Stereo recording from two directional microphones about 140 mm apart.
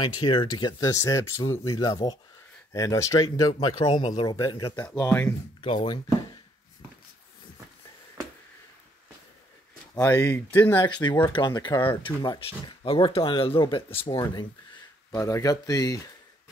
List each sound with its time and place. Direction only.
0.0 s speech: 35° left (ahead or behind)
3.5 s speech: 40° left (ahead or behind)
4.5 s speech: 25° left (ahead or behind)
5.6 s speech: 35° left (ahead or behind)
9.9 s speech: 20° left (ahead or behind)
11.2 s speech: 30° left (ahead or behind)